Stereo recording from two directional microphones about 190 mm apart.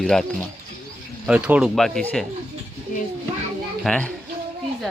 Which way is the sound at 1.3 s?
5° right (ahead or behind).